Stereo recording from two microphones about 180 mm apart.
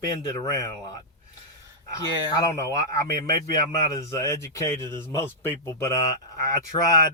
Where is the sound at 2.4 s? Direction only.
20° left (ahead or behind).